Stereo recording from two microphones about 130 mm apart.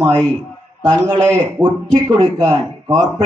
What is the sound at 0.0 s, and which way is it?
A man's voice, 30° right (ahead or behind).